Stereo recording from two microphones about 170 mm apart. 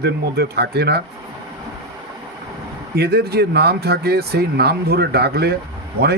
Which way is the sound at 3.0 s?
70° right (ahead or behind).